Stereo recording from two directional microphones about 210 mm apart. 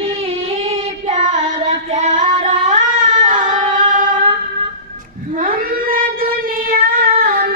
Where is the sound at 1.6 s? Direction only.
35° right (ahead or behind).